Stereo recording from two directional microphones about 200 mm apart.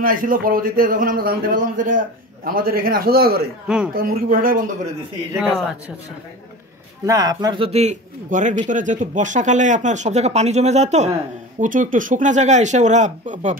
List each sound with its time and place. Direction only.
0.0 s a man's voice: 45° right (ahead or behind)
3.6 s speech: 5° right (ahead or behind)
3.9 s a man's voice: 45° right (ahead or behind)
5.4 s speech: centre (ahead or behind)
7.1 s a man's voice: 20° right (ahead or behind); by 13.6 s 40° right (ahead or behind)